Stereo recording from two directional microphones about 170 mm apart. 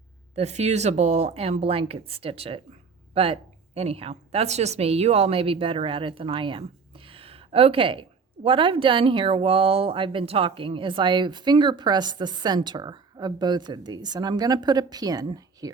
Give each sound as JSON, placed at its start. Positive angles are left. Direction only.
{"t": 0.3, "sound": "a woman's voice", "side_deg": -40}